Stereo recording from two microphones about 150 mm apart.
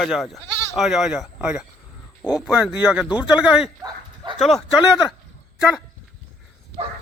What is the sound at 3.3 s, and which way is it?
Speech, 5° right (ahead or behind).